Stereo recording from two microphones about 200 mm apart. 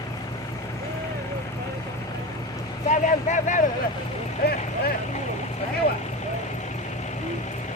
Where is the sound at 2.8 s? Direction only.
35° left (ahead or behind).